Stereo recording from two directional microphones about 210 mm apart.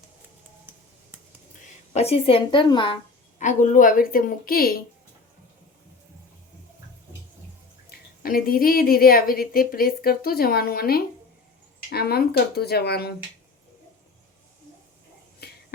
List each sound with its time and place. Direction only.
1.9 s a woman's voice: 30° left (ahead or behind)
7.9 s speech: 45° left (ahead or behind)
15.4 s a sound: 50° left (ahead or behind)